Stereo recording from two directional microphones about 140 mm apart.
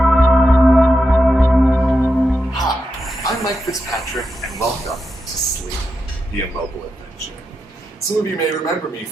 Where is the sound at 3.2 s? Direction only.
25° left (ahead or behind).